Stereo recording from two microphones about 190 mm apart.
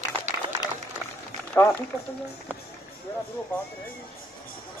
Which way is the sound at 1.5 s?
5° left (ahead or behind).